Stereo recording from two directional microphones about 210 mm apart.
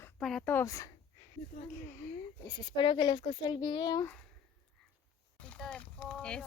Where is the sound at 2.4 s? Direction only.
20° left (ahead or behind).